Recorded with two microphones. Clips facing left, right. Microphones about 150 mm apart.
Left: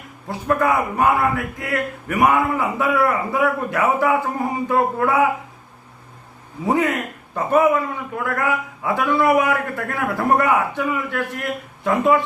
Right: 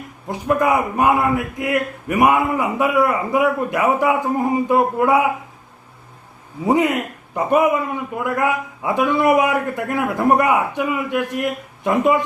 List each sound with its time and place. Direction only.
0.3 s a man's voice: 20° right (ahead or behind)
6.7 s a man's voice: 15° right (ahead or behind)